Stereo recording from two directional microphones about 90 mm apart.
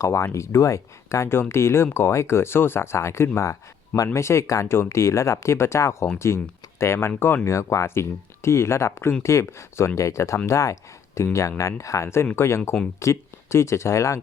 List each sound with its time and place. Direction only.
0.0 s speech: 30° left (ahead or behind)